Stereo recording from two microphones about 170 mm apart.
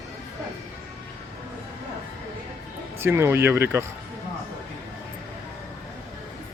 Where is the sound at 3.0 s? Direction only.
15° right (ahead or behind).